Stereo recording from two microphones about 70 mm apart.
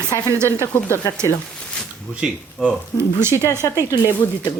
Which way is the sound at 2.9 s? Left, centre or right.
Right.